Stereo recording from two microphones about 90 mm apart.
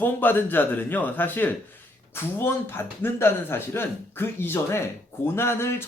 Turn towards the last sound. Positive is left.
turn(degrees=30)  # may be behind; listen again after turning